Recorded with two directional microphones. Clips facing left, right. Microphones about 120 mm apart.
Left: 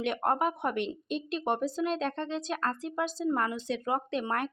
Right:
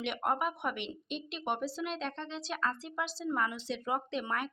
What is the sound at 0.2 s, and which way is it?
A woman's voice, 40° left (ahead or behind).